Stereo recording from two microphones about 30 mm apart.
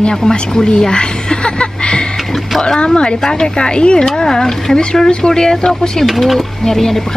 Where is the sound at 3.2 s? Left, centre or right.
Left.